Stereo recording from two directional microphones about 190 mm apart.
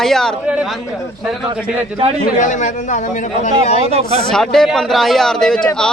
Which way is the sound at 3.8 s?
30° right (ahead or behind).